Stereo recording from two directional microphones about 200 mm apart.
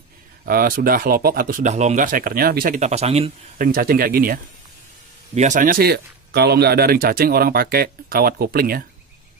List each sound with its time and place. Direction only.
0.5 s speech: 45° right (ahead or behind); by 3.3 s 30° right (ahead or behind)
3.5 s speech: 45° right (ahead or behind)